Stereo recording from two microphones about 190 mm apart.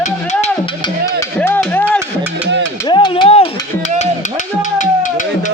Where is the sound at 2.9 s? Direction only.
25° left (ahead or behind).